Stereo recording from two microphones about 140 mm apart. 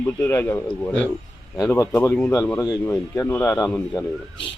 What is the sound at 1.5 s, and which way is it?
Speech, 25° left (ahead or behind).